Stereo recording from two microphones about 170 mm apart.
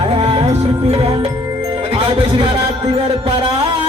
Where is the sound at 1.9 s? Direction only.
35° right (ahead or behind).